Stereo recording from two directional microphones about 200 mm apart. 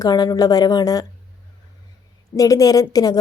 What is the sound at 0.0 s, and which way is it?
A woman's voice, 20° left (ahead or behind).